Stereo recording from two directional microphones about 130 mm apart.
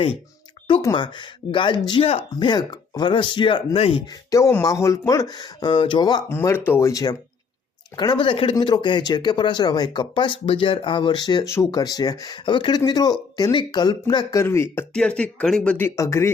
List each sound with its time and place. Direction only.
0.9 s speech: 35° left (ahead or behind)
2.3 s speech: 35° left (ahead or behind)
4.0 s speech: 25° left (ahead or behind)
6.2 s speech: 20° left (ahead or behind)
14.9 s speech: 10° left (ahead or behind)
16.0 s speech: 20° left (ahead or behind)